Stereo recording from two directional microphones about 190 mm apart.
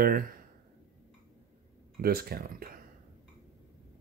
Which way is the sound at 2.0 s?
55° right (ahead or behind).